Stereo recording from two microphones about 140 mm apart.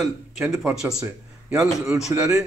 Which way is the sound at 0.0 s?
Centre (ahead or behind).